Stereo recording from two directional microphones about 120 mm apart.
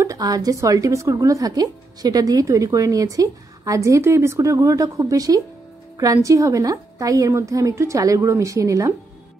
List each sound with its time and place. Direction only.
0.0 s speech: 30° right (ahead or behind)